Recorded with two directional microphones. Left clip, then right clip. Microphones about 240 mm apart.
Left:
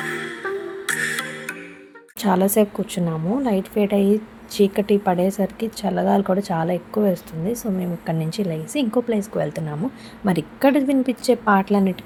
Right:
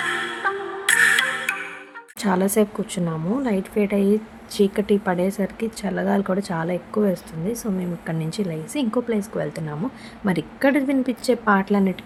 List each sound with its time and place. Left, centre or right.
0.9 s music: right
2.2 s a woman's voice: centre